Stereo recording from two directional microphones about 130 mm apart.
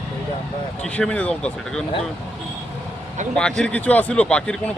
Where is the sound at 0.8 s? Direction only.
10° left (ahead or behind).